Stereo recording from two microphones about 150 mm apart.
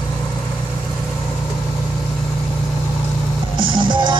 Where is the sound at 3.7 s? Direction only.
30° right (ahead or behind).